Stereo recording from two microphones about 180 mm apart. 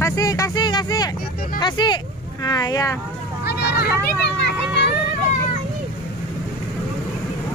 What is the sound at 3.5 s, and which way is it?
Speech, 65° left (ahead or behind).